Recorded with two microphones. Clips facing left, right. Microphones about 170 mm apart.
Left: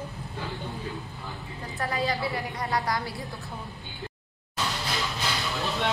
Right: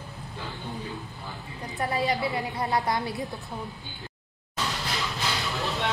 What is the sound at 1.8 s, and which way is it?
A woman's voice, 20° right (ahead or behind).